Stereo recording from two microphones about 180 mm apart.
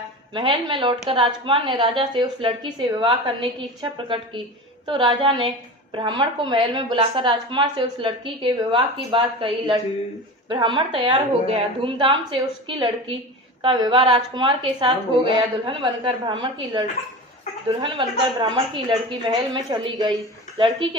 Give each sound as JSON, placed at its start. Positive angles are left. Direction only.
{"t": 0.3, "sound": "a woman's voice", "side_deg": -30}